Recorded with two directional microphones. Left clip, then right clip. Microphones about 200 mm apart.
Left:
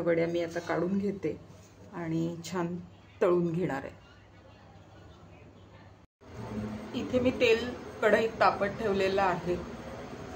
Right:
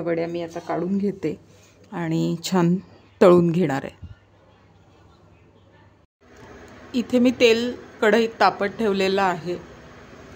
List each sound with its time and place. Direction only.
0.0 s speech: 40° right (ahead or behind)
1.9 s a woman's voice: 55° right (ahead or behind)
6.9 s a woman's voice: 60° right (ahead or behind)